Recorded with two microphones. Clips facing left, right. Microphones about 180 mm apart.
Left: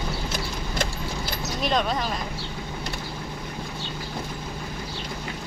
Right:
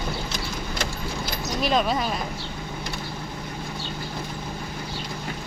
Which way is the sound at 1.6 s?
5° right (ahead or behind).